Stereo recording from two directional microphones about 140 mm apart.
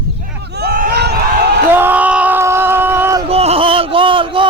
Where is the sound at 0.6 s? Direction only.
90° right.